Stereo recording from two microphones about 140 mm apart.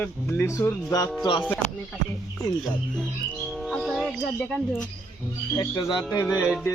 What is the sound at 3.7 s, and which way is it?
Bird, centre (ahead or behind).